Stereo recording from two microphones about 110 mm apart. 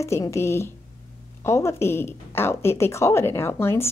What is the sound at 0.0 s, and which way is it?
A woman's voice, 25° left (ahead or behind).